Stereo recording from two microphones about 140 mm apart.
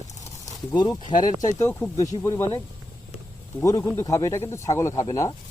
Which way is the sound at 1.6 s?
20° left (ahead or behind).